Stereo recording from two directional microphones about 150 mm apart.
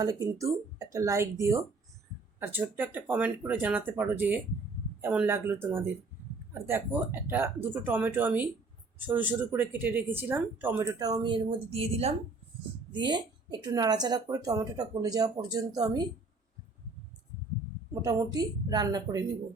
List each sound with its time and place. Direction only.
0.0 s speech: 25° right (ahead or behind); by 12.1 s 40° right (ahead or behind)
12.9 s speech: 30° right (ahead or behind)
18.0 s speech: 25° right (ahead or behind)